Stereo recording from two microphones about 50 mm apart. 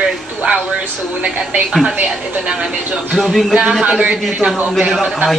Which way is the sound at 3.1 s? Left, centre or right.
Centre.